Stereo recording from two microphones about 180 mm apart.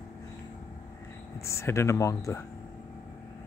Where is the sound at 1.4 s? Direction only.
15° left (ahead or behind).